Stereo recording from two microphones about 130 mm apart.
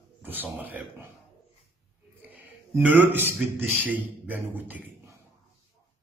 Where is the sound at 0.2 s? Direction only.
15° right (ahead or behind).